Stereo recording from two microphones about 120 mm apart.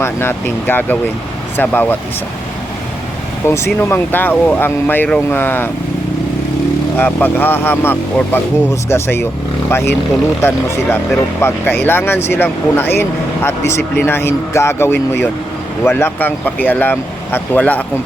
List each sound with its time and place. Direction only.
0.0 s speech: 20° left (ahead or behind)
3.4 s speech: 20° left (ahead or behind)
7.0 s speech: 15° left (ahead or behind)